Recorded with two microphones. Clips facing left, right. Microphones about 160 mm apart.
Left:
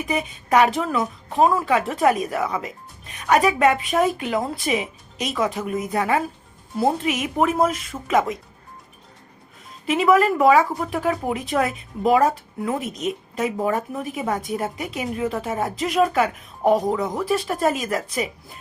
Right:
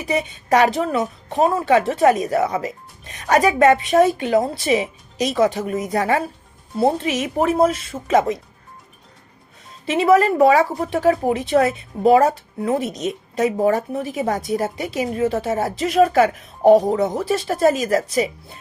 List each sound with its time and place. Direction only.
0.0 s speech: 35° right (ahead or behind)
9.9 s speech: 30° right (ahead or behind)